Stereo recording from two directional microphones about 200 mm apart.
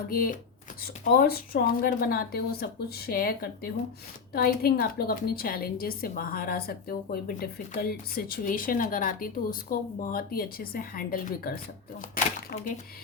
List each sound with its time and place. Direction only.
0.1 s a woman's voice: 45° left (ahead or behind)